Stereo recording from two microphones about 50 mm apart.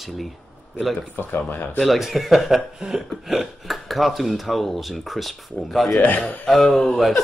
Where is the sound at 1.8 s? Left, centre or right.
Centre.